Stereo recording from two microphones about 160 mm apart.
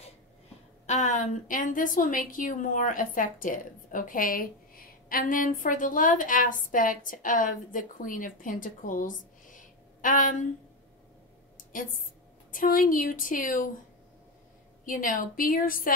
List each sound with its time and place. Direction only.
0.8 s a woman's voice: 50° left (ahead or behind)
11.5 s a sound: 60° left (ahead or behind)
12.4 s a woman's voice: 60° left (ahead or behind)
14.9 s a woman's voice: 55° left (ahead or behind)